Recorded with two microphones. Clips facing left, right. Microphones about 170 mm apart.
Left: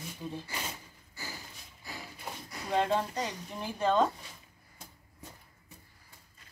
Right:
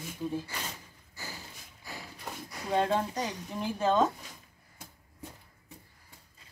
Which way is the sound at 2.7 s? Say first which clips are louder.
Right 1 dB; centre (ahead or behind).